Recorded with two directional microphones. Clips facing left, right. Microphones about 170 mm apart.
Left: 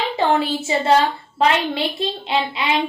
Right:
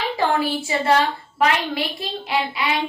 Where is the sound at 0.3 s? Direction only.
25° left (ahead or behind).